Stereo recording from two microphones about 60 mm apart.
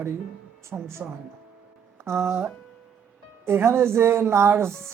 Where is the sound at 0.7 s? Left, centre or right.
Right.